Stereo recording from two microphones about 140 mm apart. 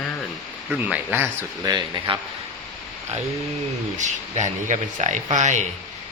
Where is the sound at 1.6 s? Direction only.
30° right (ahead or behind).